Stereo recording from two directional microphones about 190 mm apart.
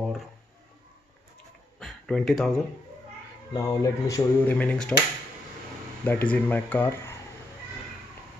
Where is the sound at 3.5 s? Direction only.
15° left (ahead or behind).